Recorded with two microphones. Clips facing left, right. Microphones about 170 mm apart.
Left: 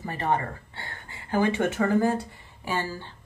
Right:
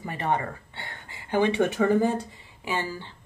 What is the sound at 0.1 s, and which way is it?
A woman's voice, 20° right (ahead or behind).